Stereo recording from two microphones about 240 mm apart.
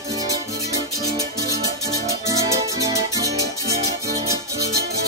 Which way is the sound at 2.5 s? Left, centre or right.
Centre.